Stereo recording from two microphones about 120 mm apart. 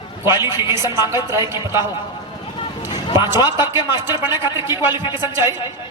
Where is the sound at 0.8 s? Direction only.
35° left (ahead or behind).